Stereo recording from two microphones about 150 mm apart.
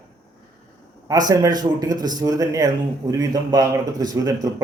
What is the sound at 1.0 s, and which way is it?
Speech, 25° right (ahead or behind).